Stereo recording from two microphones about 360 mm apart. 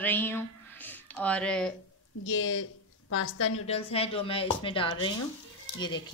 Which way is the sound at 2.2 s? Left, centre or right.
Left.